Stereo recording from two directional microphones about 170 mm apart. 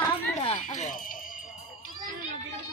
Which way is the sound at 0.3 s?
40° left (ahead or behind).